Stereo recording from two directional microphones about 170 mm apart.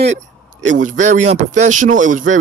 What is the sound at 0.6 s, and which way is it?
Speech, 50° right (ahead or behind).